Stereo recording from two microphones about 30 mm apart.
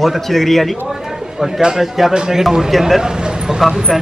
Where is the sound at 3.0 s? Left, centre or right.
Right.